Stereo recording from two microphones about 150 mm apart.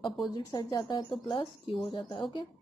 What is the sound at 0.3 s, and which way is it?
A woman's voice, 25° left (ahead or behind).